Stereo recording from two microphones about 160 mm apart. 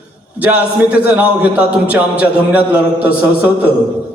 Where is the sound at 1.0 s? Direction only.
10° right (ahead or behind).